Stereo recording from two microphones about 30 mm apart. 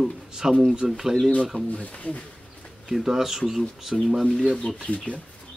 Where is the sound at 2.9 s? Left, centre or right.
Centre.